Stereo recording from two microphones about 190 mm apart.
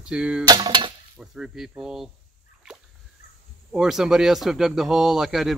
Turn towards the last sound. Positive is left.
turn(degrees=0)  # may be behind; listen again after turning